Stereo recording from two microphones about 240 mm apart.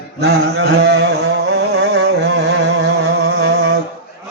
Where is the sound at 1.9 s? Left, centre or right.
Right.